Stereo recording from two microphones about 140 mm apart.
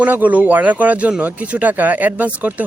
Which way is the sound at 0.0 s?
10° right (ahead or behind).